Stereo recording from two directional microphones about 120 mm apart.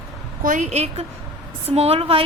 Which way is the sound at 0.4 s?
90° right.